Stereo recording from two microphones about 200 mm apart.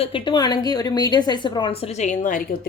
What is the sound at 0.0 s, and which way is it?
A woman's voice, 25° left (ahead or behind).